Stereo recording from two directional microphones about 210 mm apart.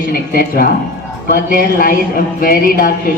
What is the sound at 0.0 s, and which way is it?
Speech, 45° left (ahead or behind).